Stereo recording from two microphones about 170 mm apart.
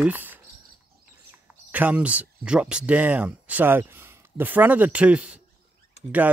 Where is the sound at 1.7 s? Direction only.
10° right (ahead or behind).